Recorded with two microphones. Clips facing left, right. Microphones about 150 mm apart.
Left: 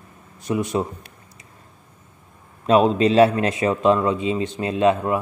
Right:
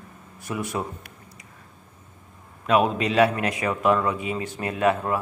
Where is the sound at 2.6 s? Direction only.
30° left (ahead or behind).